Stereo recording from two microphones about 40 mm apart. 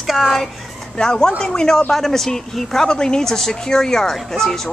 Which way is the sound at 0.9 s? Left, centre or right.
Centre.